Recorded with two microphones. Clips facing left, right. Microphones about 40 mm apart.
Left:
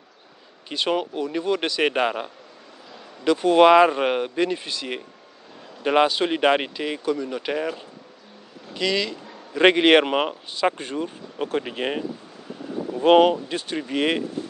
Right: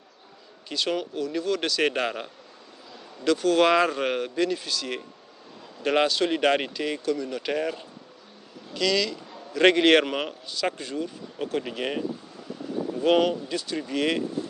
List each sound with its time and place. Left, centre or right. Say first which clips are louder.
0.7 s a man's voice: left 4 dB; left
8.7 s a man's voice: left 1 dB; left